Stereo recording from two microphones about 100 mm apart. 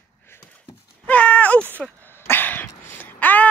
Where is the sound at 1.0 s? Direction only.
15° left (ahead or behind).